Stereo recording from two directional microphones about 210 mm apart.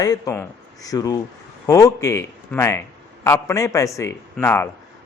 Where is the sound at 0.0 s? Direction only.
15° left (ahead or behind).